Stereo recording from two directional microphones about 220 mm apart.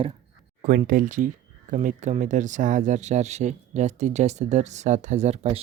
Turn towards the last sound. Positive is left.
turn(degrees=-30)  # may be behind; listen again after turning